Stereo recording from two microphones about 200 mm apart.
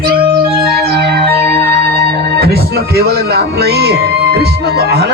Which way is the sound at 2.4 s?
50° right (ahead or behind).